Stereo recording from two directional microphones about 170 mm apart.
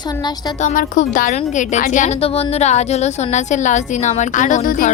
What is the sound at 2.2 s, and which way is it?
A woman's voice, 35° left (ahead or behind).